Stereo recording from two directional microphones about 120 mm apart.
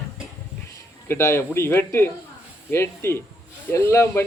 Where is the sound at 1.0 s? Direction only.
20° left (ahead or behind).